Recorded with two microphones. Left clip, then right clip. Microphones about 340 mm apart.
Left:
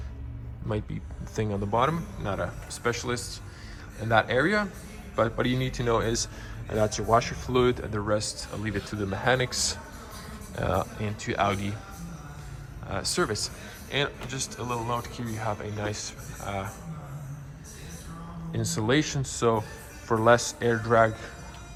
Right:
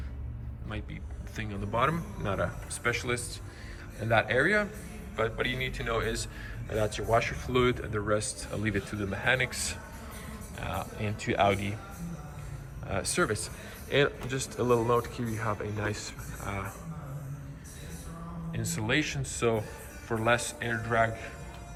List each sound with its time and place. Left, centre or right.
1.4 s a man's voice: centre
11.0 s speech: centre
12.9 s speech: centre
18.5 s a man's voice: centre